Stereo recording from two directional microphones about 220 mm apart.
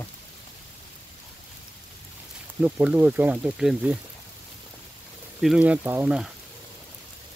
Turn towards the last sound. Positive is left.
turn(degrees=-5)  # may be behind; listen again after turning